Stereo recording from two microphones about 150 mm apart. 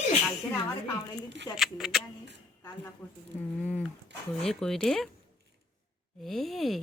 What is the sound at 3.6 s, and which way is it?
Speech, 10° left (ahead or behind).